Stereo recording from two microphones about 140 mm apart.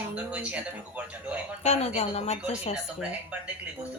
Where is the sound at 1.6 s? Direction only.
50° left (ahead or behind).